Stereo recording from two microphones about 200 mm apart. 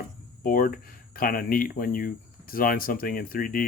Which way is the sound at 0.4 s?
45° left (ahead or behind).